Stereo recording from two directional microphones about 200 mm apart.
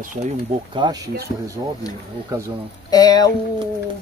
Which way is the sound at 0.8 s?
25° right (ahead or behind).